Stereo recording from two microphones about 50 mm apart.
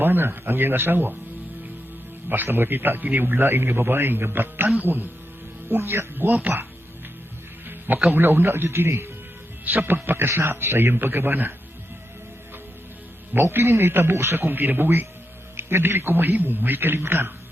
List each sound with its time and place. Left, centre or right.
0.0 s a man's voice: right
2.3 s a man's voice: right
3.3 s a man's voice: right
5.6 s a man's voice: right
8.1 s a man's voice: right
9.6 s a man's voice: right
10.2 s speech: right
10.9 s a man's voice: right
13.3 s a man's voice: right
14.4 s a man's voice: right